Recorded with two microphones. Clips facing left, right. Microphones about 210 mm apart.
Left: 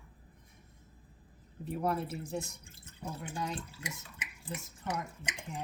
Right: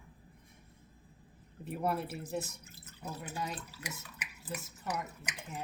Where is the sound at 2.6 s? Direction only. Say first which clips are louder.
Left 2 dB; 30° left (ahead or behind).